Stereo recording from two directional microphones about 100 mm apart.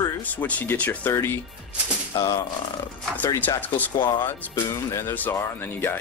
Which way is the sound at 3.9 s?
50° left (ahead or behind).